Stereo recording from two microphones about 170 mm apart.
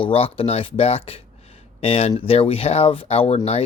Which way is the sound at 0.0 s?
35° left (ahead or behind).